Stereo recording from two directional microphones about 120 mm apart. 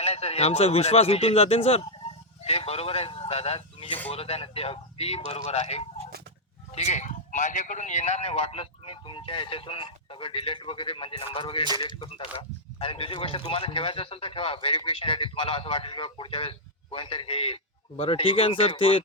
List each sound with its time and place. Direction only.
0.0 s a man's voice: 60° left (ahead or behind)